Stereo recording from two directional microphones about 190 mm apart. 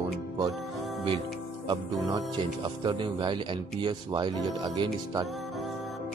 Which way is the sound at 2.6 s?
25° right (ahead or behind).